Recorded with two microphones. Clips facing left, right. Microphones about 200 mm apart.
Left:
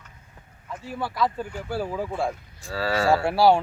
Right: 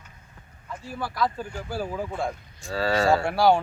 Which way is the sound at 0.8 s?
25° left (ahead or behind).